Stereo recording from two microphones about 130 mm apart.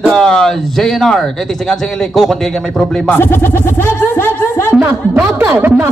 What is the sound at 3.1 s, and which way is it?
Speech, 15° left (ahead or behind).